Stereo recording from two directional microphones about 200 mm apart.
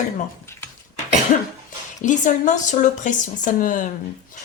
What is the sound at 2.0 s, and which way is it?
Speech, 40° left (ahead or behind).